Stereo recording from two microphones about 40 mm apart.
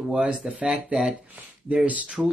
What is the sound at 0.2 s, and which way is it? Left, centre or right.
Speech, right.